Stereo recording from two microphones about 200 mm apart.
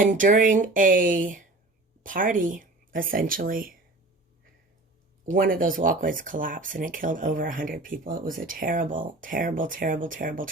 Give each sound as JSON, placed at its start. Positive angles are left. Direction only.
{"t": 0.0, "sound": "speech", "side_deg": -40}
{"t": 5.2, "sound": "speech", "side_deg": -45}